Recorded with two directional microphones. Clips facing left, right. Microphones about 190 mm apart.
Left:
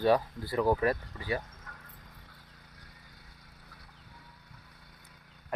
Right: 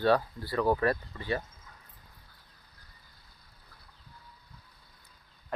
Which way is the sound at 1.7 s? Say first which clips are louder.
Left 4 dB; 85° left.